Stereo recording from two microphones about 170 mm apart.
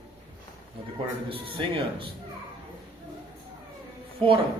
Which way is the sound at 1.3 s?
30° right (ahead or behind).